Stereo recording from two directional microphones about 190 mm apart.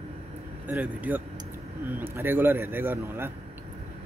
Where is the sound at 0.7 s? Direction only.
10° right (ahead or behind).